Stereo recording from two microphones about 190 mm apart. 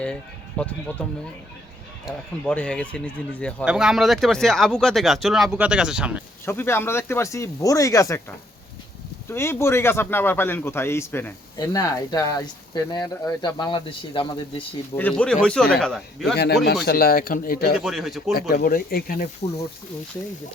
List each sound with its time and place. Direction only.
0.6 s a man's voice: 5° left (ahead or behind)
6.4 s a man's voice: 10° left (ahead or behind)
9.3 s a man's voice: 15° left (ahead or behind)
14.9 s speech: 10° left (ahead or behind)
16.3 s a man's voice: 60° left (ahead or behind)
17.7 s speech: centre (ahead or behind)
18.3 s speech: 55° left (ahead or behind)